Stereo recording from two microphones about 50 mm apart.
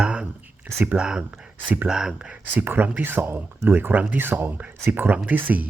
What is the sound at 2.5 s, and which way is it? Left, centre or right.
Speech, right.